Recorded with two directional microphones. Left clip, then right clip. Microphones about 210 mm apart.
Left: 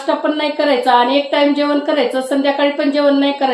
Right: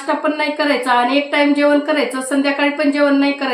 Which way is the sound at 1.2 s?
15° right (ahead or behind).